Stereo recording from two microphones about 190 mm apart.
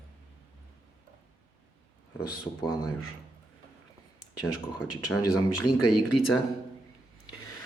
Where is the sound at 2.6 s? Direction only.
20° left (ahead or behind).